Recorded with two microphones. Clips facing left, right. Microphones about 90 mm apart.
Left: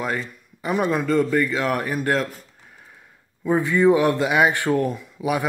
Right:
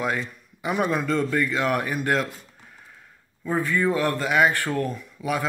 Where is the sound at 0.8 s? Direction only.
5° left (ahead or behind).